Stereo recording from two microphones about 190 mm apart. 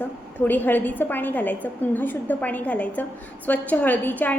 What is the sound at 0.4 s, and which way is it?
A woman's voice, 10° left (ahead or behind).